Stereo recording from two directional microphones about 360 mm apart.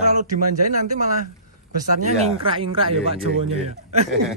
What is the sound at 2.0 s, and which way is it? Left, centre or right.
Speech, centre.